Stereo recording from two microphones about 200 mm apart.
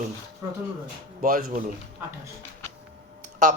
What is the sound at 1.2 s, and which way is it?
Speech, 45° right (ahead or behind).